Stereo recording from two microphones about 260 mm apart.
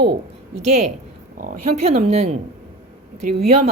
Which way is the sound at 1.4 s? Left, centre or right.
Right.